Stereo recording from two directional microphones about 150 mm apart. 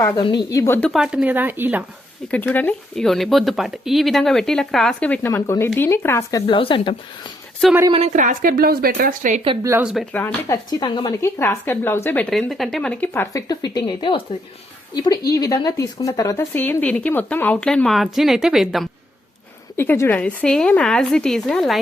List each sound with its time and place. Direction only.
0.5 s speech: 15° left (ahead or behind)
0.9 s speech: 5° right (ahead or behind)
2.3 s speech: 10° left (ahead or behind)
6.5 s speech: 35° left (ahead or behind)
7.9 s a woman's voice: 40° right (ahead or behind)
8.1 s speech: 60° right (ahead or behind)
9.8 s speech: centre (ahead or behind)
10.1 s speech: 10° left (ahead or behind)
10.5 s speech: 25° left (ahead or behind)
11.3 s speech: 15° left (ahead or behind)
13.3 s speech: 25° left (ahead or behind); by 18.9 s centre (ahead or behind)
19.7 s speech: 15° left (ahead or behind)